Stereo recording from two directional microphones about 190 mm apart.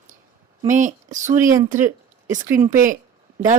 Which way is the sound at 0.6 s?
40° right (ahead or behind).